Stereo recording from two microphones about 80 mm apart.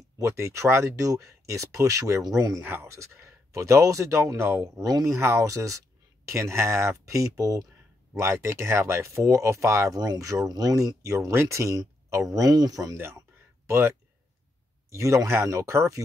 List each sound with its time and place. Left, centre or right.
0.2 s speech: right
2.6 s speech: right
9.9 s speech: right
12.4 s speech: right
12.9 s speech: right